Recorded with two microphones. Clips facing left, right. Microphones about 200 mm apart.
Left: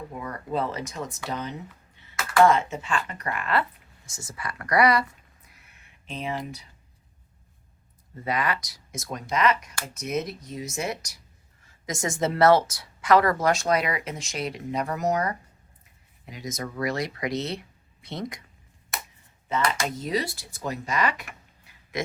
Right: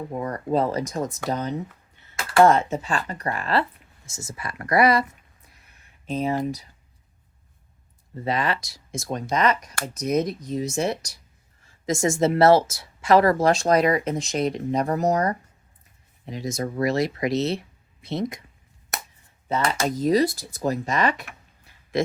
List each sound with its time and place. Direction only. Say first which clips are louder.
0.1 s speech: right 7 dB; 40° right (ahead or behind); by 5.0 s 25° right (ahead or behind)
5.5 s a sound: even; 40° right (ahead or behind)
8.2 s speech: right 3 dB; 30° right (ahead or behind)
19.5 s speech: right 3 dB; 35° right (ahead or behind)